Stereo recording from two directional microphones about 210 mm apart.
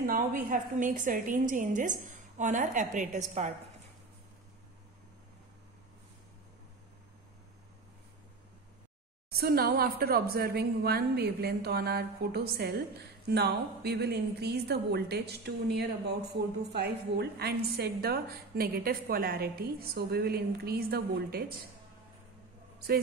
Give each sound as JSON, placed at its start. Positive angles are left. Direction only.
{"t": 0.0, "sound": "a woman's voice", "side_deg": -40}
{"t": 9.3, "sound": "a woman's voice", "side_deg": -45}